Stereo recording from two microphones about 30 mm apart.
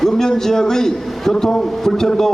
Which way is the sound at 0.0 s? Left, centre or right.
Centre.